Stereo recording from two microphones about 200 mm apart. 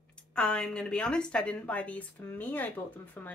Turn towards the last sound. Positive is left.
turn(degrees=10)  # may be behind; listen again after turning